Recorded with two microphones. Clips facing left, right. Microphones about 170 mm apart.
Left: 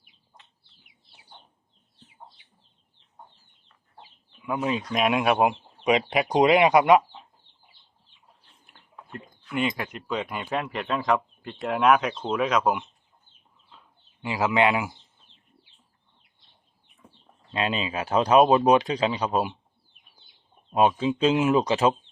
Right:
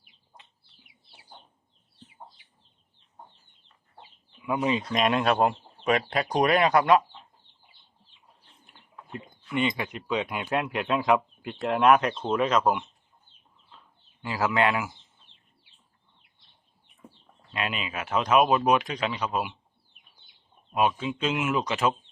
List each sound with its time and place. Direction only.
4.4 s speech: centre (ahead or behind); by 7.2 s 20° left (ahead or behind)
8.6 s speech: centre (ahead or behind)
14.2 s speech: 20° left (ahead or behind)
17.5 s speech: 30° left (ahead or behind)
20.7 s speech: 30° left (ahead or behind)